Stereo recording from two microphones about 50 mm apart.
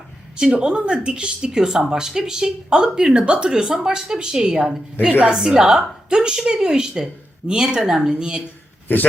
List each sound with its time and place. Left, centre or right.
0.5 s speech: centre